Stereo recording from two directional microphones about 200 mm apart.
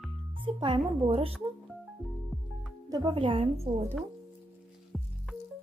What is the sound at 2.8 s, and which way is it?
Speech, 20° right (ahead or behind).